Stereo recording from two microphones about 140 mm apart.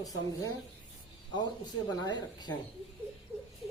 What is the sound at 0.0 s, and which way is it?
Speech, 25° left (ahead or behind).